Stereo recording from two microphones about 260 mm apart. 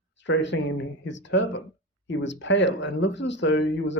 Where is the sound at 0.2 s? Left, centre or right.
Left.